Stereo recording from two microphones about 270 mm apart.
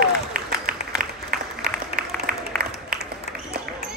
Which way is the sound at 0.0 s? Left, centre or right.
Right.